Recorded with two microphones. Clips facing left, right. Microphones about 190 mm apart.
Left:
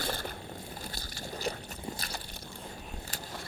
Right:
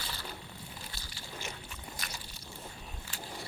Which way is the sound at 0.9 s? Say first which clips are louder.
Left 6 dB; 45° left (ahead or behind).